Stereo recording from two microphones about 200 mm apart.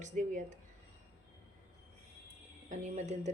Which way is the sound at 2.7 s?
35° right (ahead or behind).